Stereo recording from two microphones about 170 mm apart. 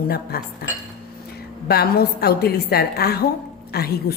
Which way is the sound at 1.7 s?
65° left (ahead or behind).